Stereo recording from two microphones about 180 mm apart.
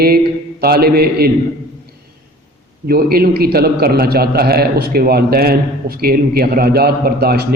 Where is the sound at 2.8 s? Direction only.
55° right (ahead or behind).